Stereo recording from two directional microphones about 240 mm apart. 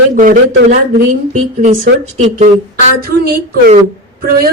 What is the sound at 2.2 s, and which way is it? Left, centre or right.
Speech, right.